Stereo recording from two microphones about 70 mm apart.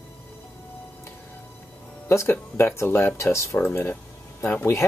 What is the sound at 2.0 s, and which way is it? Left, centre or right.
Speech, left.